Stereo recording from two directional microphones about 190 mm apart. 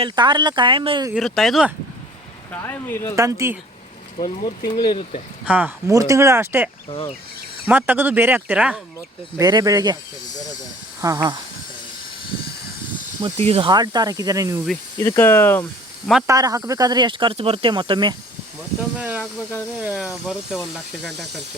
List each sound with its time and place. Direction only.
0.0 s speech: 25° right (ahead or behind)
1.1 s speech: centre (ahead or behind)
2.5 s speech: 10° left (ahead or behind)
3.2 s speech: 15° right (ahead or behind)
4.4 s speech: 25° left (ahead or behind)
5.5 s speech: 10° right (ahead or behind)
6.8 s speech: 30° left (ahead or behind)
7.7 s speech: 10° right (ahead or behind)
9.4 s speech: 20° right (ahead or behind)
11.0 s speech: 20° right (ahead or behind)
13.2 s speech: 35° right (ahead or behind); by 14.6 s 15° right (ahead or behind)
14.9 s speech: 15° left (ahead or behind)
16.2 s speech: 20° right (ahead or behind)
18.9 s speech: 5° right (ahead or behind)